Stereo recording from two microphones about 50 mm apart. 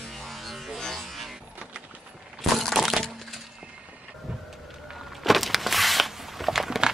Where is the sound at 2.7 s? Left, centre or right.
Centre.